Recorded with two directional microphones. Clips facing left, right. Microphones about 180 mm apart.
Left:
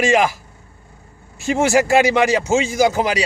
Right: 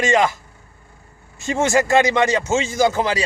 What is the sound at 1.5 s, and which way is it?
A man's voice, 10° left (ahead or behind).